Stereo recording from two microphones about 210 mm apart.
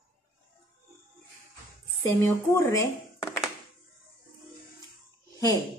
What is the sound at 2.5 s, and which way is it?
Speech, 15° left (ahead or behind).